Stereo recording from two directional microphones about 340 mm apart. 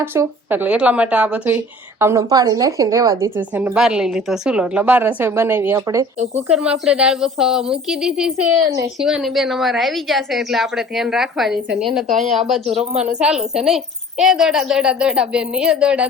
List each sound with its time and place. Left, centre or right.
0.0 s a woman's voice: centre
12.0 s speech: right
12.3 s a woman's voice: centre
12.9 s speech: centre
13.1 s a woman's voice: centre